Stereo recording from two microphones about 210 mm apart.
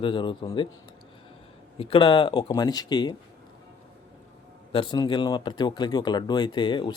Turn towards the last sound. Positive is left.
turn(degrees=20)  # may be behind; listen again after turning